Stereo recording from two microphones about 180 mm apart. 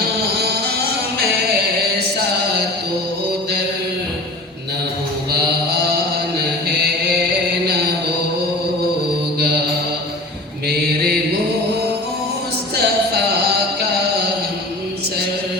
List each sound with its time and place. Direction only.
0.0 s music: 65° right (ahead or behind)
5.3 s chant: 60° right (ahead or behind)
9.4 s music: 65° right (ahead or behind)
10.7 s mantra: 60° right (ahead or behind)
12.7 s music: 65° right (ahead or behind)